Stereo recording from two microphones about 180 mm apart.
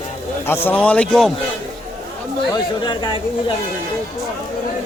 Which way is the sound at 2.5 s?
25° left (ahead or behind).